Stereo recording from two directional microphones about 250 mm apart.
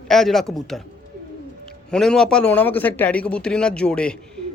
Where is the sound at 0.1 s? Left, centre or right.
Centre.